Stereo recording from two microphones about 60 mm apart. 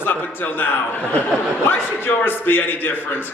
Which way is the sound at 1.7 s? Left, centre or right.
Left.